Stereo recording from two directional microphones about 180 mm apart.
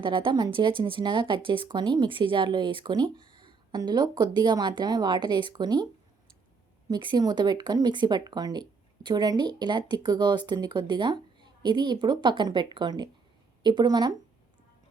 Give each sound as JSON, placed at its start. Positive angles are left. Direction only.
{"t": 0.0, "sound": "speech", "side_deg": -25}